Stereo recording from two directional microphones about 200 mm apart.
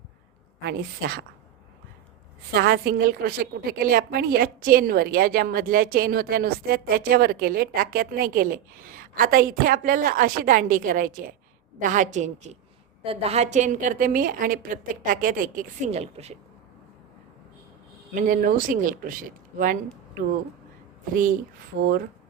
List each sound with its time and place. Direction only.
0.6 s a woman's voice: 50° right (ahead or behind)
2.5 s a woman's voice: 50° right (ahead or behind); by 16.3 s 30° right (ahead or behind)
18.1 s a woman's voice: 40° right (ahead or behind)
21.1 s a woman's voice: 45° right (ahead or behind)